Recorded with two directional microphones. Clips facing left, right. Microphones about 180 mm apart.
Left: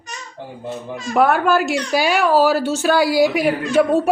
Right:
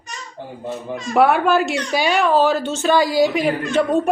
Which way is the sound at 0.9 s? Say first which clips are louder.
Right 1 dB; centre (ahead or behind).